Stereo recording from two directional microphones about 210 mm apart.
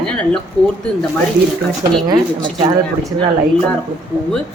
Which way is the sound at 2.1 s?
20° right (ahead or behind).